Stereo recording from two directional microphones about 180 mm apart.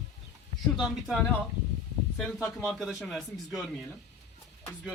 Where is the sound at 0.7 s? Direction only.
Centre (ahead or behind).